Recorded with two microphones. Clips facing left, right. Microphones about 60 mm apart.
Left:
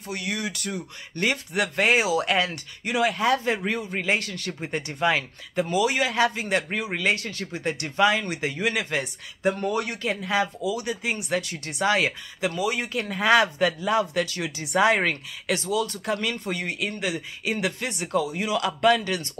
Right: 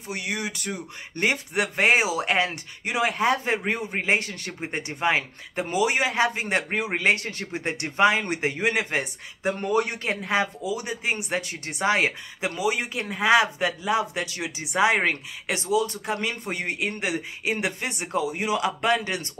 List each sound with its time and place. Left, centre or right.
0.1 s speech: centre